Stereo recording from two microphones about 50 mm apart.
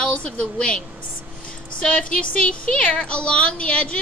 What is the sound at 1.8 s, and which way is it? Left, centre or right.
A woman's voice, left.